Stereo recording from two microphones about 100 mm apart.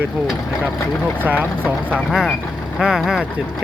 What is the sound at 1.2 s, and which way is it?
Speech, 15° right (ahead or behind).